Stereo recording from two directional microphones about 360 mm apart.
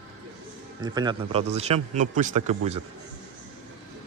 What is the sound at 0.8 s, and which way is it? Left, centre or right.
A man's voice, centre.